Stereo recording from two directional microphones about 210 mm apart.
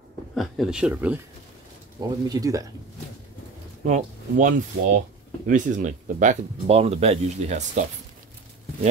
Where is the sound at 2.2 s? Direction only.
15° right (ahead or behind).